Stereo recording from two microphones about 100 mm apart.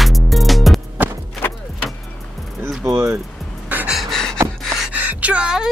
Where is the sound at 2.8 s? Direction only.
30° right (ahead or behind).